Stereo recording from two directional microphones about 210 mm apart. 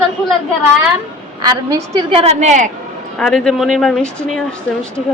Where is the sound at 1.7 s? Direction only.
25° right (ahead or behind).